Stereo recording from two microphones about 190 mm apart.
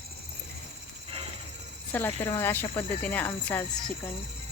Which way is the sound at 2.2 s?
15° left (ahead or behind).